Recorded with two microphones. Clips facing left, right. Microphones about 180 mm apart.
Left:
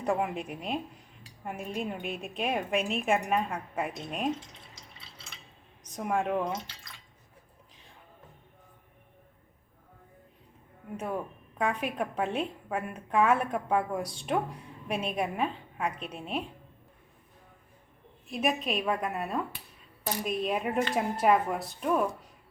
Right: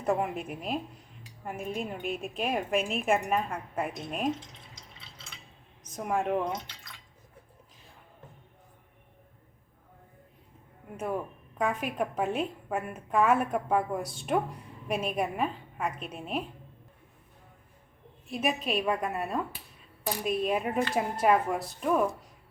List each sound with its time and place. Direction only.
0.0 s a woman's voice: centre (ahead or behind)
5.8 s speech: centre (ahead or behind)
10.9 s a woman's voice: 5° right (ahead or behind)
18.3 s a woman's voice: centre (ahead or behind)